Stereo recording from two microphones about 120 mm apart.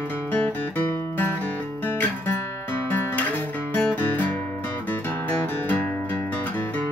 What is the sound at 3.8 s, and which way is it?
Music, 15° left (ahead or behind).